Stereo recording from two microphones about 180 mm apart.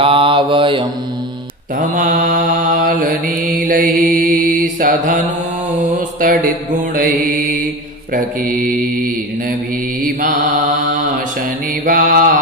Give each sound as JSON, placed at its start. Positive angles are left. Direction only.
{"t": 0.0, "sound": "mantra", "side_deg": -30}
{"t": 1.8, "sound": "mantra", "side_deg": -50}
{"t": 10.0, "sound": "mantra", "side_deg": -50}
{"t": 11.8, "sound": "mantra", "side_deg": -50}